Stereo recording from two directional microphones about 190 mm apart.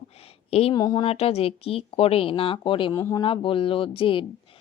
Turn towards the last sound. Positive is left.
turn(degrees=30)  # may be behind; listen again after turning